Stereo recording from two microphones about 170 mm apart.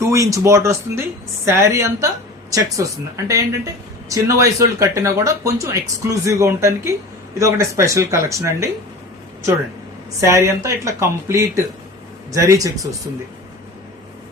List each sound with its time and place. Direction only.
0.0 s speech: 20° right (ahead or behind)
10.2 s speech: 15° right (ahead or behind)